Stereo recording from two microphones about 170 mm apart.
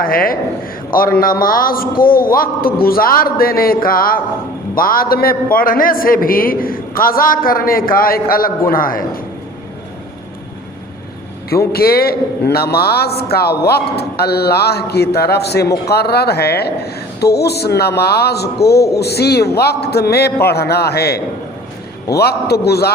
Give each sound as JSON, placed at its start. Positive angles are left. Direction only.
{"t": 0.0, "sound": "a man's voice", "side_deg": 60}
{"t": 11.7, "sound": "a woman's voice", "side_deg": 65}